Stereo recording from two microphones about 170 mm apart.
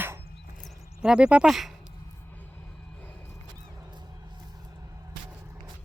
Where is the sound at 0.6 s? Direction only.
5° right (ahead or behind).